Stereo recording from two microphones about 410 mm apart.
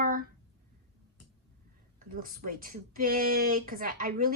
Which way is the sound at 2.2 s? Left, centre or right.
Centre.